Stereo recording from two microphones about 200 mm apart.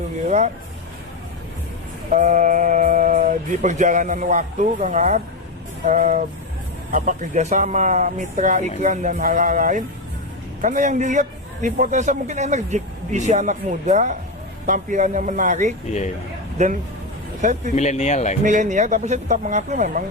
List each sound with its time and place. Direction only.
0.3 s a man's voice: 35° right (ahead or behind)
2.1 s a man's voice: 40° right (ahead or behind)
17.7 s speech: 35° left (ahead or behind)
18.4 s a man's voice: 40° right (ahead or behind)